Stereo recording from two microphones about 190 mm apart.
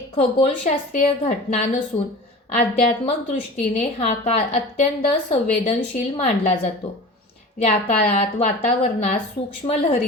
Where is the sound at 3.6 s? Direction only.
35° left (ahead or behind).